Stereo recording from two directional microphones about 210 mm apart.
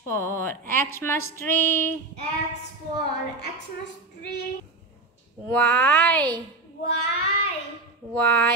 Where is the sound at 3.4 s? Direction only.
50° left (ahead or behind).